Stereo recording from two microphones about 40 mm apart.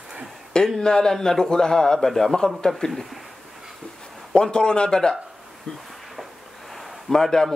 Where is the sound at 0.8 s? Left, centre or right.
Centre.